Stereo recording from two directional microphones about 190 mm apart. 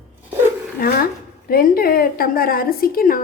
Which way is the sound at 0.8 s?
50° left (ahead or behind).